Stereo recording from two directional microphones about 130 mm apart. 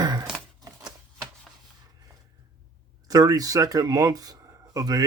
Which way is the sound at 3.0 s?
30° right (ahead or behind).